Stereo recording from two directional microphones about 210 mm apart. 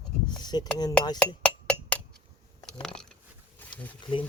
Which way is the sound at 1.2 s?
5° left (ahead or behind).